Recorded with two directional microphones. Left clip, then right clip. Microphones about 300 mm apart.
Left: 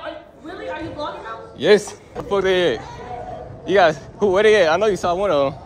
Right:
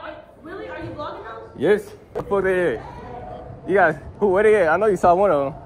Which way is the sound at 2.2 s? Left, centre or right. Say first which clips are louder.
Left 2 dB; centre.